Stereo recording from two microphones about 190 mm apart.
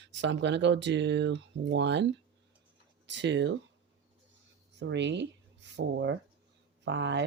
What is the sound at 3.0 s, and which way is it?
Speech, 70° right (ahead or behind).